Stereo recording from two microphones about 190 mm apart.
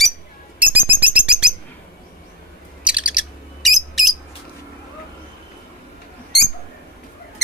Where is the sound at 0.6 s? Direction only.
10° right (ahead or behind).